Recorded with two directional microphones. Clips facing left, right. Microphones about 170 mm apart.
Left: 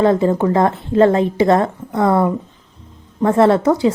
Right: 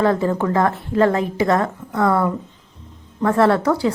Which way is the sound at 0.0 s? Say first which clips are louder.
Left 4 dB; 20° left (ahead or behind).